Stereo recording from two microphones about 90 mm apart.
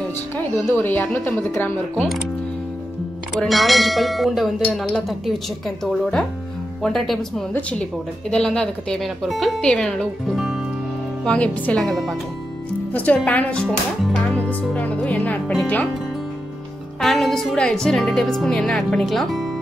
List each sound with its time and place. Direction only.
0.6 s speech: 20° left (ahead or behind)
3.3 s speech: centre (ahead or behind)
6.8 s a woman's voice: centre (ahead or behind)
10.2 s music: 5° right (ahead or behind)
11.2 s a woman's voice: 15° left (ahead or behind)
11.9 s speech: centre (ahead or behind)
12.9 s a woman's voice: 15° left (ahead or behind)
17.0 s speech: 5° left (ahead or behind)